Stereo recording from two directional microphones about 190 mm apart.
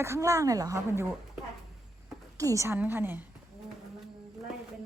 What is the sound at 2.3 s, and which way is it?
Speech, 15° right (ahead or behind).